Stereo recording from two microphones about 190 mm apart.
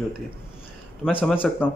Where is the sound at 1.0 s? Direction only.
10° left (ahead or behind).